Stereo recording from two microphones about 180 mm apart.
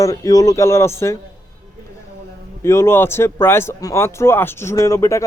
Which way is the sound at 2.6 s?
15° left (ahead or behind).